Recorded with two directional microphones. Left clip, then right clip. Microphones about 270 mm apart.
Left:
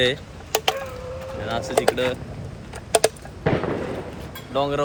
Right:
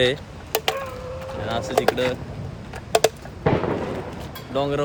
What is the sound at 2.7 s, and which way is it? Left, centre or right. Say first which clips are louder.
Typing: right 1 dB; left.